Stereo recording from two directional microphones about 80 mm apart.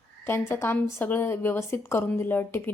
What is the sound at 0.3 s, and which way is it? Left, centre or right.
A woman's voice, left.